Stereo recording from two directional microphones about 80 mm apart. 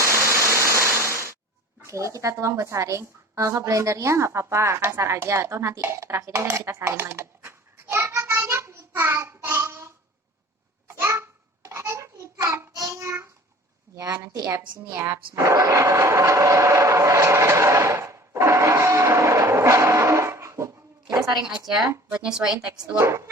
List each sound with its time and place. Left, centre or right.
0.0 s a sound: right
1.9 s a woman's voice: right
6.4 s a sound: right
8.9 s child singing: right
10.8 s a sound: right
13.9 s a woman's voice: right
15.4 s vehicle: right
21.8 s speech: centre
23.0 s speech: right